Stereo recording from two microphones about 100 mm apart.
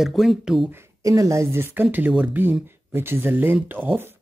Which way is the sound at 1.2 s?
30° right (ahead or behind).